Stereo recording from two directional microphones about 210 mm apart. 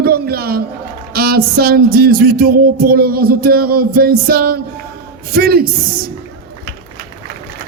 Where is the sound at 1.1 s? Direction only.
45° right (ahead or behind).